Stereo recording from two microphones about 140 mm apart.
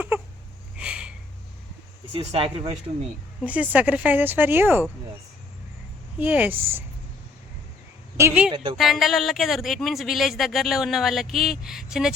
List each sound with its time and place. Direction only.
0.8 s a sound: 5° right (ahead or behind)
2.1 s speech: 45° right (ahead or behind)
3.4 s speech: 10° right (ahead or behind)
6.1 s speech: 10° right (ahead or behind)
8.1 s speech: 20° right (ahead or behind)
8.8 s speech: centre (ahead or behind)